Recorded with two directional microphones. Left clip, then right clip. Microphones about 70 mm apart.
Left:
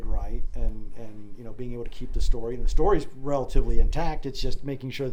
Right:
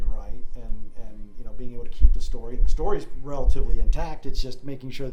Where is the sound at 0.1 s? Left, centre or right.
Left.